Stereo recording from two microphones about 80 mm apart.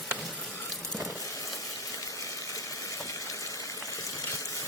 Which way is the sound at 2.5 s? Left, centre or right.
Left.